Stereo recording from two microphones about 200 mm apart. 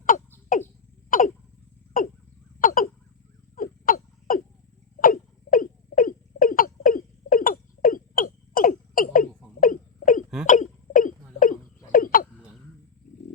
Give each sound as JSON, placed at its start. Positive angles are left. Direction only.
{"t": 0.5, "sound": "cough", "side_deg": 40}
{"t": 1.1, "sound": "hiccup", "side_deg": 45}
{"t": 2.6, "sound": "hiccup", "side_deg": 45}
{"t": 3.5, "sound": "a sound", "side_deg": 45}
{"t": 10.4, "sound": "hiccup", "side_deg": 40}
{"t": 11.9, "sound": "frog", "side_deg": 45}